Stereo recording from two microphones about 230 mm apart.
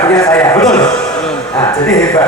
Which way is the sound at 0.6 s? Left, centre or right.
Centre.